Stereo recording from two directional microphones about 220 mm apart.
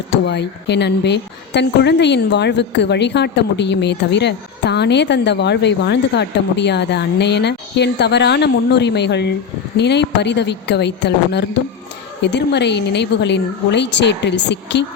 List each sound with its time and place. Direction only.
0.1 s speech: 50° left (ahead or behind)